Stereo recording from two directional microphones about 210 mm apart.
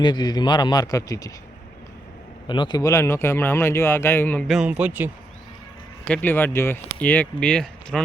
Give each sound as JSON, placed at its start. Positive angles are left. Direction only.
{"t": 0.0, "sound": "a man's voice", "side_deg": 20}
{"t": 2.5, "sound": "speech", "side_deg": 20}
{"t": 6.1, "sound": "speech", "side_deg": 10}